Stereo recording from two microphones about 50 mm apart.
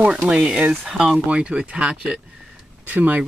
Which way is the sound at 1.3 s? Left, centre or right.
Right.